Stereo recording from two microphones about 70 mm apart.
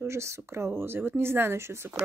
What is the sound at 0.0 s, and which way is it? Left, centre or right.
Speech, right.